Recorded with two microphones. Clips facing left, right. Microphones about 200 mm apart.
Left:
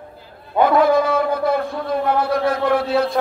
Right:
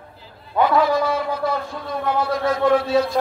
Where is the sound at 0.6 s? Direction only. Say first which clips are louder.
Left 3 dB; 55° left (ahead or behind).